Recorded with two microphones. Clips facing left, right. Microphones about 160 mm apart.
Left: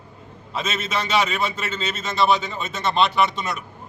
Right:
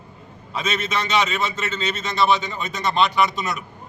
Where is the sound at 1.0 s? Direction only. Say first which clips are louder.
Left 1 dB; 10° left (ahead or behind).